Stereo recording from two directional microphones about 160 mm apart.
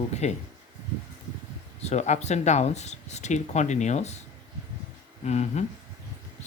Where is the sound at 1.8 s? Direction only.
45° left (ahead or behind).